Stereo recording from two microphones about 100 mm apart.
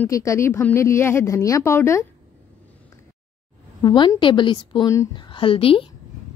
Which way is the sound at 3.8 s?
50° left (ahead or behind).